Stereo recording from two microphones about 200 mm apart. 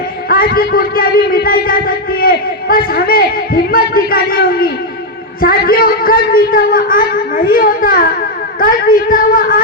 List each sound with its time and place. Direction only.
0.3 s a man's voice: 50° left (ahead or behind)